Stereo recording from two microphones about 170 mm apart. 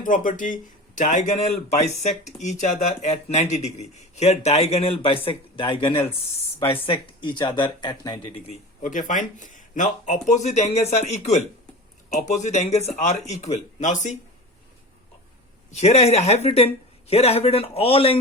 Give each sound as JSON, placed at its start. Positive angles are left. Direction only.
{"t": 0.0, "sound": "speech", "side_deg": 50}
{"t": 6.8, "sound": "speech", "side_deg": 30}
{"t": 8.4, "sound": "speech", "side_deg": 50}
{"t": 15.7, "sound": "speech", "side_deg": 40}